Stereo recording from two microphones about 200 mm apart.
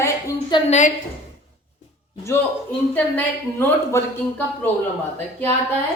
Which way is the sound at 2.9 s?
10° left (ahead or behind).